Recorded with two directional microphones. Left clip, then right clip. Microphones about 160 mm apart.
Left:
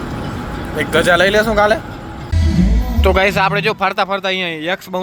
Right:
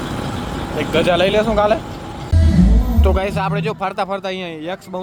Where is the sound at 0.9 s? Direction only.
30° left (ahead or behind).